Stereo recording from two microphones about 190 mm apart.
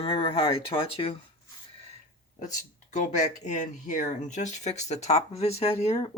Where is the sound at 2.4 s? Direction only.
40° left (ahead or behind).